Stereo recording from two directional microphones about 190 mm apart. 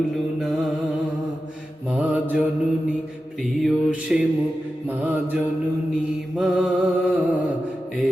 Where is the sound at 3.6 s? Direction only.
5° right (ahead or behind).